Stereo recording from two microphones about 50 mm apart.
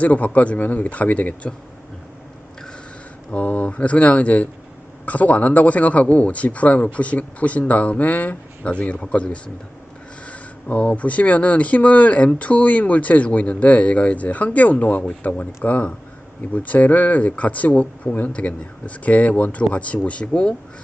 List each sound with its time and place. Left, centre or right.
0.0 s speech: left
3.3 s speech: left